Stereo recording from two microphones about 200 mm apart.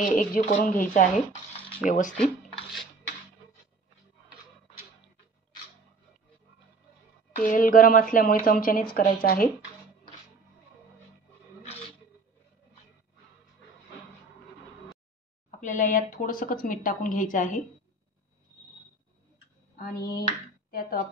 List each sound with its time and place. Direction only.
0.0 s a woman's voice: 40° left (ahead or behind)
7.3 s speech: 45° left (ahead or behind)
15.6 s a woman's voice: 40° left (ahead or behind)
19.8 s speech: 50° left (ahead or behind)
20.2 s a sound: 45° left (ahead or behind)